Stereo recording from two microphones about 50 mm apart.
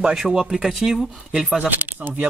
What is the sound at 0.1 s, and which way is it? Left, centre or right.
Speech, centre.